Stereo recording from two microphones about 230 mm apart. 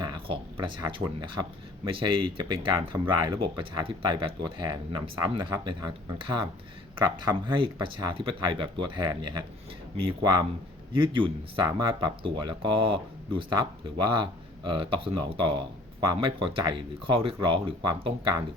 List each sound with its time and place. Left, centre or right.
0.0 s speech: centre